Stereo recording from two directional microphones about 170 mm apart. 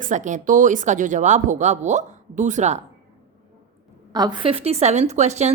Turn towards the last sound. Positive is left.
turn(degrees=-40)  # may be behind; listen again after turning